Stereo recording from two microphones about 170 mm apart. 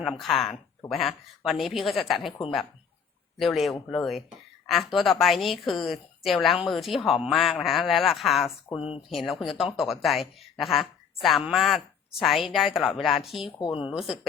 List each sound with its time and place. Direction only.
0.0 s a woman's voice: centre (ahead or behind)
3.3 s a woman's voice: centre (ahead or behind)
8.7 s speech: 35° left (ahead or behind)
9.0 s a woman's voice: centre (ahead or behind)
13.6 s speech: 30° left (ahead or behind)
13.8 s a woman's voice: 5° right (ahead or behind)